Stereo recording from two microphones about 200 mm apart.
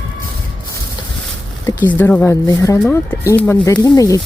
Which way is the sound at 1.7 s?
10° left (ahead or behind).